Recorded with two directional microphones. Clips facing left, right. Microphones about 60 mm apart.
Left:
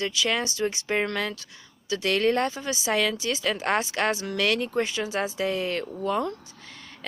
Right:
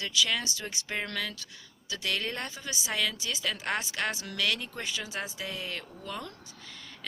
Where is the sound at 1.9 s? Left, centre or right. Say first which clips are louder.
Left 10 dB; left.